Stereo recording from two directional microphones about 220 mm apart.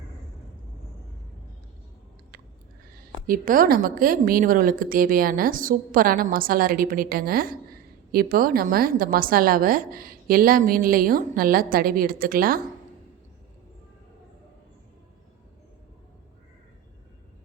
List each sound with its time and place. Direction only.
3.2 s a woman's voice: 40° right (ahead or behind)